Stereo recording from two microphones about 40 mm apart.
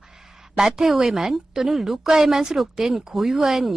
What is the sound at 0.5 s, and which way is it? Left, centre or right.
Speech, centre.